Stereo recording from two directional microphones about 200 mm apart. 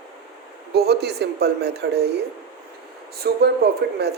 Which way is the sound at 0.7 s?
55° right (ahead or behind).